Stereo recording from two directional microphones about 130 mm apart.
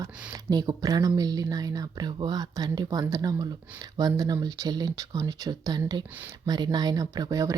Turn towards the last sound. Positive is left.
turn(degrees=-30)  # may be behind; listen again after turning